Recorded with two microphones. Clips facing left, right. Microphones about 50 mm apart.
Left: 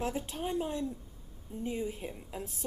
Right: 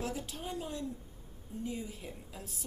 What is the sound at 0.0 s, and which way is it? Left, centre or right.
A woman's voice, left.